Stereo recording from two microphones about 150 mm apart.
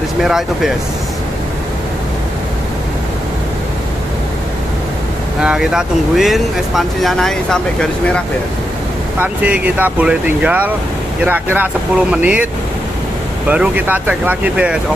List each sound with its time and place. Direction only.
0.2 s speech: 5° right (ahead or behind)
5.4 s speech: 5° right (ahead or behind)
9.2 s speech: 10° right (ahead or behind)
13.5 s speech: 10° right (ahead or behind)